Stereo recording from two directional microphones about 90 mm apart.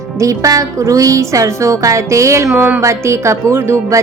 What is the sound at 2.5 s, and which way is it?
Speech, 20° right (ahead or behind).